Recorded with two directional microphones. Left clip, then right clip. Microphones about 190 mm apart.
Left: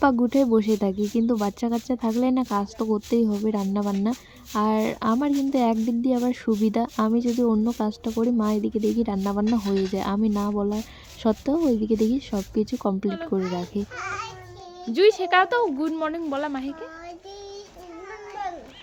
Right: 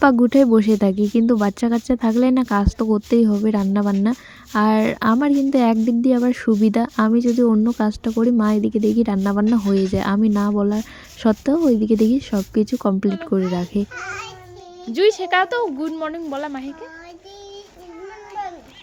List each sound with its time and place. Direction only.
0.0 s speech: 25° right (ahead or behind)
13.9 s a woman's voice: 5° right (ahead or behind)